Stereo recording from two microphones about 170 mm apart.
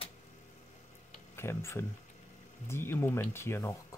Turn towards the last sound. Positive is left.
turn(degrees=15)  # may be behind; listen again after turning